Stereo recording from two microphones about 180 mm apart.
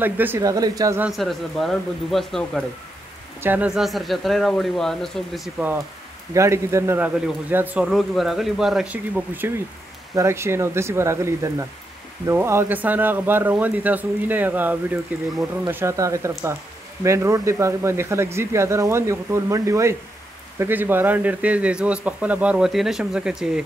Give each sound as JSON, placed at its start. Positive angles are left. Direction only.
{"t": 0.0, "sound": "speech", "side_deg": -10}
{"t": 1.0, "sound": "speech", "side_deg": 0}
{"t": 3.3, "sound": "speech", "side_deg": -10}
{"t": 6.3, "sound": "speech", "side_deg": -15}